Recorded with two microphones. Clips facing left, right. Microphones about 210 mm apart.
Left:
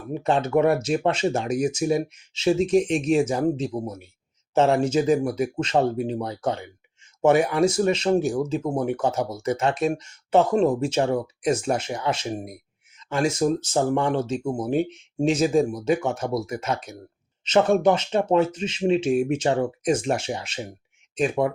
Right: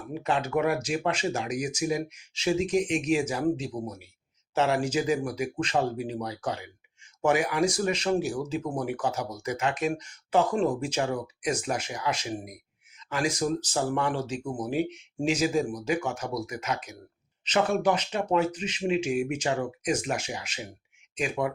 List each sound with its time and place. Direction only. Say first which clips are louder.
0.1 s speech: left 6 dB; 30° left (ahead or behind)